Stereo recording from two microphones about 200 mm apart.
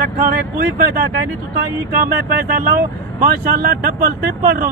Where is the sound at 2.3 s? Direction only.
50° right (ahead or behind).